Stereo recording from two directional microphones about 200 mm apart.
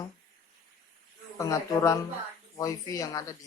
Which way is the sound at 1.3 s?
15° left (ahead or behind).